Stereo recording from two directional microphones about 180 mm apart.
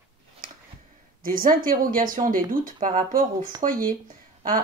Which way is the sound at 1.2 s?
50° right (ahead or behind).